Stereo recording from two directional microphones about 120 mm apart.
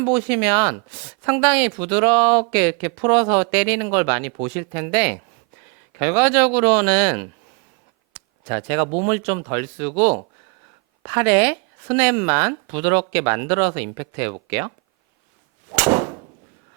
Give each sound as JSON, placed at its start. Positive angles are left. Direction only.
{"t": 0.0, "sound": "a man's voice", "side_deg": -20}
{"t": 8.4, "sound": "speech", "side_deg": -20}
{"t": 15.7, "sound": "whip", "side_deg": -15}